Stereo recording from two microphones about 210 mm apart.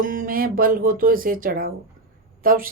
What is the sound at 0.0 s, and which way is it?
Speech, 40° right (ahead or behind).